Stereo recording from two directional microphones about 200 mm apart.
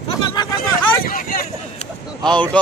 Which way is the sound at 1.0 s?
45° left (ahead or behind).